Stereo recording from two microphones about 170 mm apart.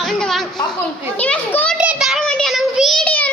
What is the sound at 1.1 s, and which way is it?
Children playing, 10° left (ahead or behind).